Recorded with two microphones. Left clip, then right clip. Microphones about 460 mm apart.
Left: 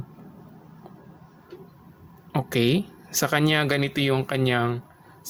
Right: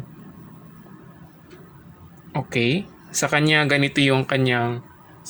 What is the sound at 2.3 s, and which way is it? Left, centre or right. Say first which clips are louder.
Speech: right 1 dB; left.